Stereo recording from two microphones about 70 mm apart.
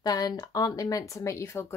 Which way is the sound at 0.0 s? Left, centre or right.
Left.